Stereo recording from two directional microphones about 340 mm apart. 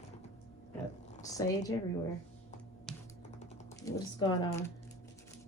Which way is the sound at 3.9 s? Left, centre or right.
Centre.